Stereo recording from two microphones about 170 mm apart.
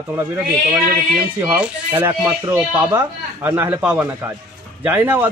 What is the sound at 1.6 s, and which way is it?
Speech, 15° right (ahead or behind).